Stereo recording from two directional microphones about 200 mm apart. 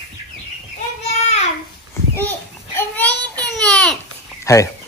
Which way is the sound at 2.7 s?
10° left (ahead or behind).